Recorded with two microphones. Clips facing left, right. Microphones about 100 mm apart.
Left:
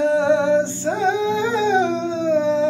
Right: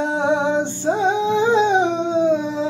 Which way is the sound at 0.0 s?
20° right (ahead or behind).